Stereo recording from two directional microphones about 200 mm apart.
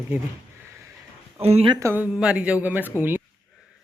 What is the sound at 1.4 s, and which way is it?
Speech, 30° right (ahead or behind).